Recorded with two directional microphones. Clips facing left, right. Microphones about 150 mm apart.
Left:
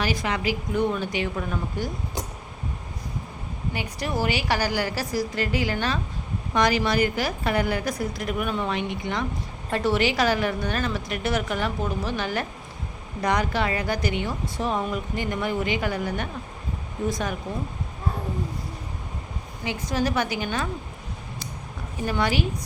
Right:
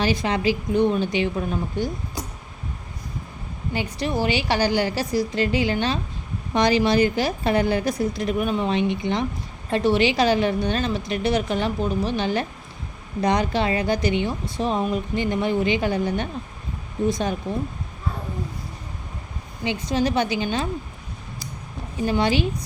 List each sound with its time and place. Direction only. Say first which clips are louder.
0.0 s a woman's voice: right 4 dB; 25° right (ahead or behind)
3.9 s a woman's voice: right 3 dB; 25° right (ahead or behind)
19.6 s a woman's voice: right 3 dB; 25° right (ahead or behind)
22.0 s a woman's voice: right 4 dB; 25° right (ahead or behind)